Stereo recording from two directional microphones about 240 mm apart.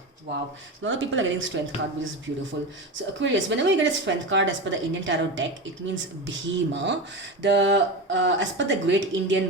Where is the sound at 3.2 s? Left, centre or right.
Right.